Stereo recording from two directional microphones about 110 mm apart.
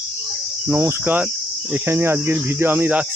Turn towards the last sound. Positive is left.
turn(degrees=-15)  # may be behind; listen again after turning